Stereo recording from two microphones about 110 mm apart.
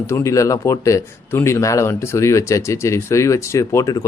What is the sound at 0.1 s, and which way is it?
Speech, 25° left (ahead or behind).